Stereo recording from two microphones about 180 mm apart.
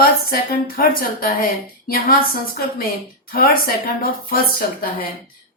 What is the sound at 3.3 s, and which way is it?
A woman's voice, 55° left (ahead or behind).